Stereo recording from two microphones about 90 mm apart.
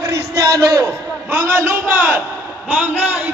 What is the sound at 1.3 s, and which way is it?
A man's voice, 20° right (ahead or behind).